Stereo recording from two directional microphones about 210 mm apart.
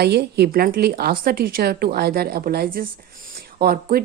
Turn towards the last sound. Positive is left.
turn(degrees=-45)  # may be behind; listen again after turning